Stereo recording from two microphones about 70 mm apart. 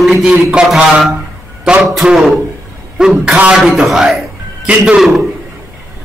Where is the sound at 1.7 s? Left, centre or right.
Centre.